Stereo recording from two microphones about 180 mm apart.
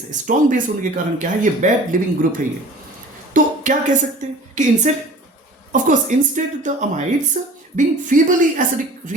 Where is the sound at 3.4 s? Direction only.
50° right (ahead or behind).